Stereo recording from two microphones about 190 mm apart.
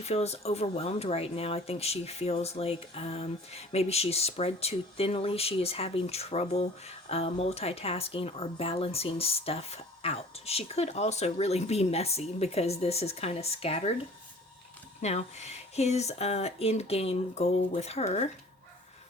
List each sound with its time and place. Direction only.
0.0 s speech: 35° left (ahead or behind)
15.0 s speech: 35° left (ahead or behind)